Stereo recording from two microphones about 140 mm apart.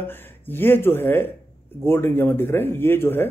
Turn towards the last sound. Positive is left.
turn(degrees=15)  # may be behind; listen again after turning